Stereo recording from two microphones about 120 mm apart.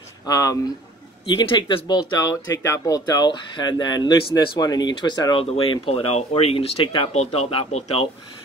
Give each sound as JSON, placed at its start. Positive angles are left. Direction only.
{"t": 0.3, "sound": "speech", "side_deg": 30}
{"t": 1.2, "sound": "speech", "side_deg": 45}
{"t": 2.1, "sound": "speech", "side_deg": 25}
{"t": 5.4, "sound": "speech", "side_deg": 55}
{"t": 7.1, "sound": "speech", "side_deg": 60}